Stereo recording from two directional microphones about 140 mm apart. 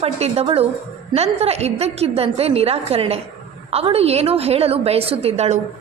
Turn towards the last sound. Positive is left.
turn(degrees=-50)  # may be behind; listen again after turning